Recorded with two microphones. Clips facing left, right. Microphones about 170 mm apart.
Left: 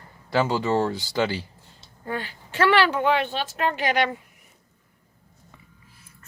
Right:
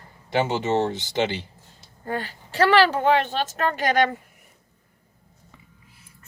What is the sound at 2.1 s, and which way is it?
A woman's voice, 40° right (ahead or behind).